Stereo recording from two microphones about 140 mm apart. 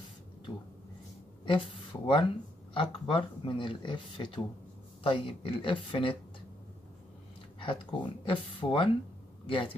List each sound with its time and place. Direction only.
1.4 s speech: 35° left (ahead or behind)
7.6 s speech: 35° left (ahead or behind)